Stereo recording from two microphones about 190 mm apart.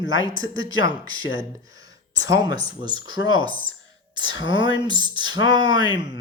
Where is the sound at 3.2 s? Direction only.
90° left.